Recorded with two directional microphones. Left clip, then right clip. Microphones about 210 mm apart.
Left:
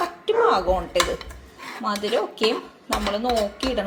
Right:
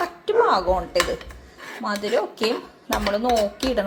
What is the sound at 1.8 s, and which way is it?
A woman's voice, 15° right (ahead or behind).